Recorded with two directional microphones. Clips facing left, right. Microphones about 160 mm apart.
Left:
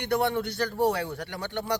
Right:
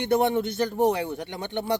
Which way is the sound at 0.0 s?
20° right (ahead or behind).